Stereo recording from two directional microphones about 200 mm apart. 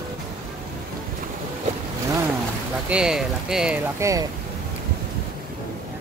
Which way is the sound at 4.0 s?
15° right (ahead or behind).